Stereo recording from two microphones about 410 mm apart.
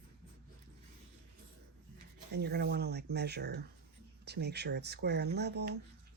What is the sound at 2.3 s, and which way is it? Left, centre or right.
Speech, right.